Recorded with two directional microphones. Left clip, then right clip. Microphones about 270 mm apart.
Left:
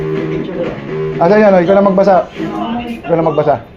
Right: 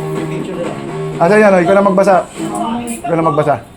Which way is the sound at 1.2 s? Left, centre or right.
Right.